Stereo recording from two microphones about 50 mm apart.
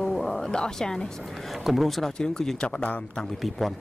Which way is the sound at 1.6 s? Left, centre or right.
Centre.